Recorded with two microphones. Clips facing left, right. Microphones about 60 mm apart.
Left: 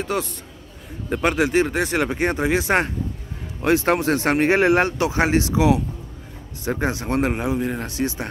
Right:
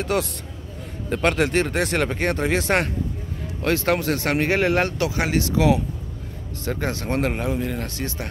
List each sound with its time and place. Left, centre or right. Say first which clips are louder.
0.0 s a man's voice: right 1 dB; centre
3.6 s speech: left 3 dB; left